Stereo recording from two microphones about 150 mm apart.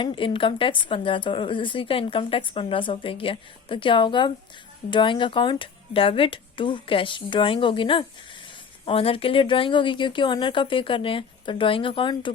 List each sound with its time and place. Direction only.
0.0 s a woman's voice: 35° left (ahead or behind)